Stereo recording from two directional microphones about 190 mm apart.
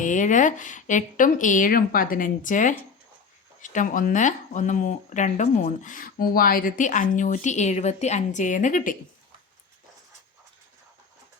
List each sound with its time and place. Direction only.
0.0 s a woman's voice: 40° left (ahead or behind)